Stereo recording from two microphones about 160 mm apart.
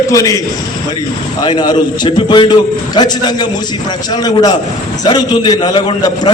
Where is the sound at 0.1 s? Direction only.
20° left (ahead or behind).